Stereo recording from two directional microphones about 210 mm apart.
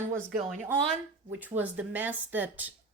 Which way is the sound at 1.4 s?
10° right (ahead or behind).